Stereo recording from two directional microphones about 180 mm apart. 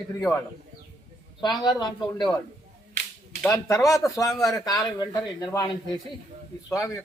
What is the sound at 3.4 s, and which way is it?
A man's voice, 15° left (ahead or behind).